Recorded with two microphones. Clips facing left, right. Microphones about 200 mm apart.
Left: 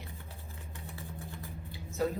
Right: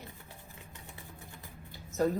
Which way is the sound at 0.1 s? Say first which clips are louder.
Left 2 dB; 15° right (ahead or behind).